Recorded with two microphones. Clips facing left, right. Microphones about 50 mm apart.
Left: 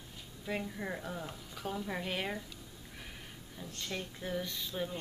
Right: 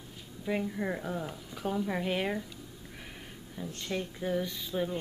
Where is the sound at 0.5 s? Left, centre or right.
Centre.